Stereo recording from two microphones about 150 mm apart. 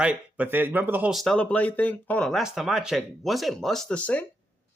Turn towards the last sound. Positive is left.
turn(degrees=5)  # may be behind; listen again after turning